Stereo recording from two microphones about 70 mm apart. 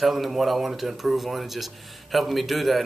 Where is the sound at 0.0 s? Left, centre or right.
Centre.